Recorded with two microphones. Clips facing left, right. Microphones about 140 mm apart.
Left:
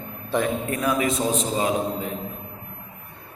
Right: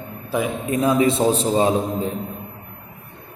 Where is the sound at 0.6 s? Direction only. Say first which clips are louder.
Right 5 dB; 25° right (ahead or behind).